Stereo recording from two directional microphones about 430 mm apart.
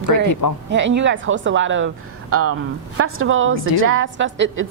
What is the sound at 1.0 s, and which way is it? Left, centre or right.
A woman's voice, right.